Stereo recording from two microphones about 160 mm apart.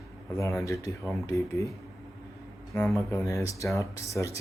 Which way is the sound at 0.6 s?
20° left (ahead or behind).